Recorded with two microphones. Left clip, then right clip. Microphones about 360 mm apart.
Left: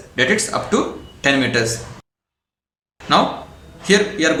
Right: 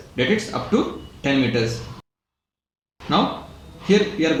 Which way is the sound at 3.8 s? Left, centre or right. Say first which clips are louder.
Left 3 dB; left.